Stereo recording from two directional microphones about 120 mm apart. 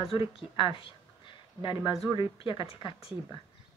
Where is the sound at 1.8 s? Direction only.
Centre (ahead or behind).